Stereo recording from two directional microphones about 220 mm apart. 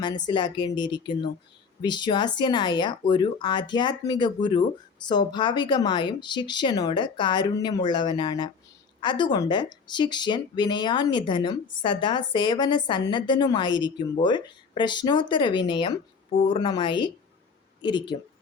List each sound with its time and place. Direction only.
0.3 s speech: 20° left (ahead or behind)